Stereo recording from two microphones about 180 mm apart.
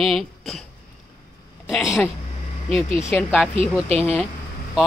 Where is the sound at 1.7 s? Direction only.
Centre (ahead or behind).